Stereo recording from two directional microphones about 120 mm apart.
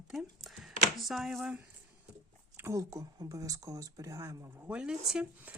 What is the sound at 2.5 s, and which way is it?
Speech, 20° right (ahead or behind).